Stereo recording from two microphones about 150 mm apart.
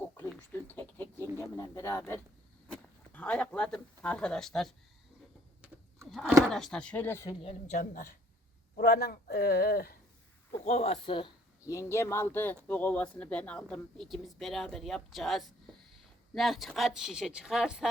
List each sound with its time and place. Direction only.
0.8 s a sound: 15° left (ahead or behind)
3.1 s speech: 10° left (ahead or behind)
6.1 s speech: centre (ahead or behind)
7.4 s a woman's voice: 55° left (ahead or behind)
8.8 s speech: 90° left
10.6 s speech: 45° left (ahead or behind)
11.6 s speech: 20° left (ahead or behind); by 17.8 s 5° right (ahead or behind)